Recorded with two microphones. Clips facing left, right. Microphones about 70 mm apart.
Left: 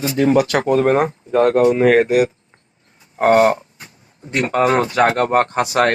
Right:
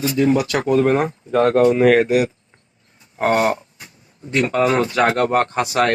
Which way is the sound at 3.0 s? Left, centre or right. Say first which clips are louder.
Left 5 dB; left.